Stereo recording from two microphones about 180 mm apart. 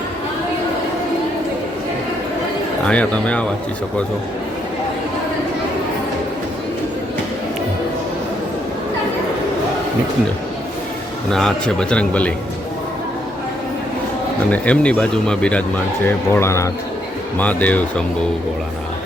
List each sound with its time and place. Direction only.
2.8 s speech: 5° left (ahead or behind)
11.3 s a man's voice: 5° left (ahead or behind)
14.5 s speech: 5° left (ahead or behind)